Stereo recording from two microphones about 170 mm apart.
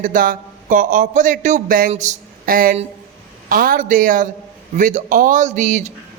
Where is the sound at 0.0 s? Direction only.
50° right (ahead or behind).